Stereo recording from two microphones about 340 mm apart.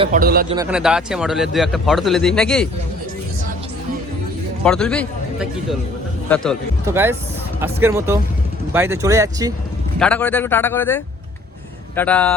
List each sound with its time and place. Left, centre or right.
0.0 s a man's voice: right
0.5 s speech: centre
4.6 s a man's voice: centre
10.0 s speech: centre